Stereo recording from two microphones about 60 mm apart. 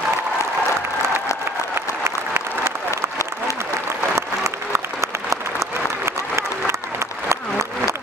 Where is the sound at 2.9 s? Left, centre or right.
Left.